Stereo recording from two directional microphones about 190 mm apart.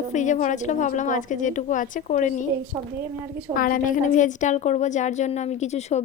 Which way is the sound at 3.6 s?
45° left (ahead or behind).